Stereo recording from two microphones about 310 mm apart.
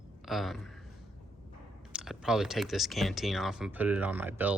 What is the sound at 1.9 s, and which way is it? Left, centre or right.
Speech, centre.